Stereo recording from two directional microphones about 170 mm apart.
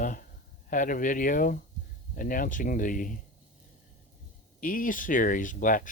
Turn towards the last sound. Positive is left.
turn(degrees=50)  # may be behind; listen again after turning